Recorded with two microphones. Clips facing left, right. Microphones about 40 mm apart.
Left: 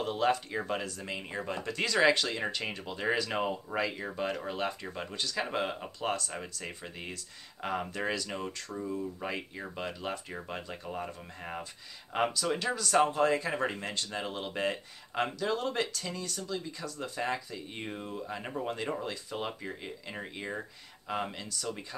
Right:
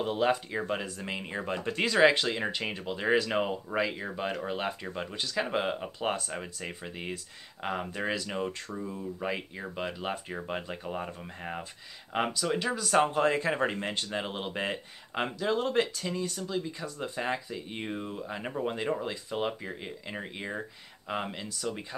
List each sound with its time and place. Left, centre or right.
0.0 s speech: centre
0.8 s speech: right
13.1 s speech: right